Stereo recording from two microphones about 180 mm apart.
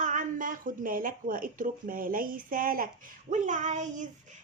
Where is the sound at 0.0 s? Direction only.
45° right (ahead or behind).